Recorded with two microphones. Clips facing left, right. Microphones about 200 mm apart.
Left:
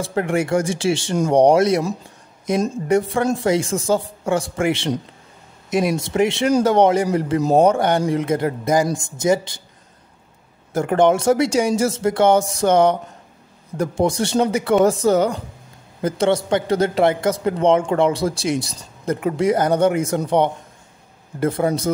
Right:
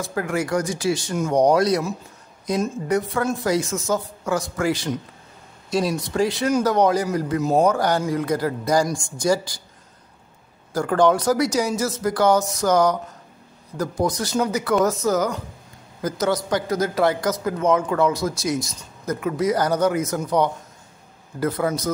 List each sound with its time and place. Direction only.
0.0 s speech: 25° left (ahead or behind)
10.7 s speech: 25° left (ahead or behind)